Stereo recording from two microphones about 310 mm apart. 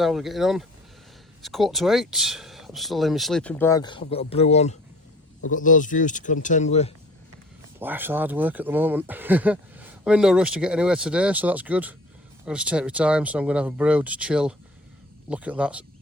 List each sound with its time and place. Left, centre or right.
0.0 s speech: centre; by 6.9 s left
7.8 s speech: centre